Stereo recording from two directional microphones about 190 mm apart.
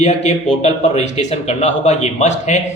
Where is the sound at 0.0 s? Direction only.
40° left (ahead or behind).